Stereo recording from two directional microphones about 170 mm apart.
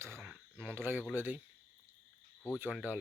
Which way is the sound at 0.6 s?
15° right (ahead or behind).